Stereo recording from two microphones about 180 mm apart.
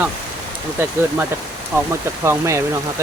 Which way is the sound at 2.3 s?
15° right (ahead or behind).